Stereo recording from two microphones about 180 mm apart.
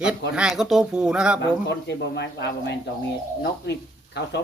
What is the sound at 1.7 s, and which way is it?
Speech, 70° left (ahead or behind).